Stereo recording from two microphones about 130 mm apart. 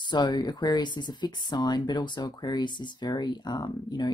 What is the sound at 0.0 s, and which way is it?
Speech, 35° left (ahead or behind).